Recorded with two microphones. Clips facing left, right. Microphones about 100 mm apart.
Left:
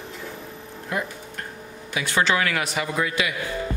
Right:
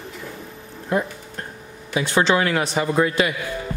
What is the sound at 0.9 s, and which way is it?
A man's voice, 30° right (ahead or behind).